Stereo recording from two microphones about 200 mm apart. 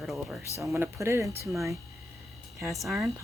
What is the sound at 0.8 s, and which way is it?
Speech, 15° right (ahead or behind).